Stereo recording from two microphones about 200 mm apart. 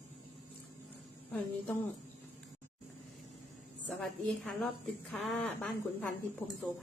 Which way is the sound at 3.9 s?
Centre (ahead or behind).